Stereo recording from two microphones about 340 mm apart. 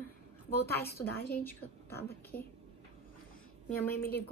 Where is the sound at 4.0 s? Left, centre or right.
Left.